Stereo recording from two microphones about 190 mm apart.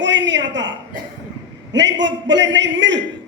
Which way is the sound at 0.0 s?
70° right (ahead or behind).